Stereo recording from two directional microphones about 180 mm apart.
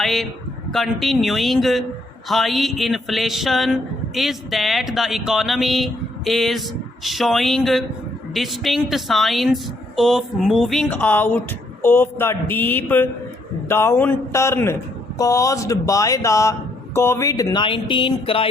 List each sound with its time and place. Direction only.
0.0 s a woman's voice: centre (ahead or behind); by 18.4 s 30° left (ahead or behind)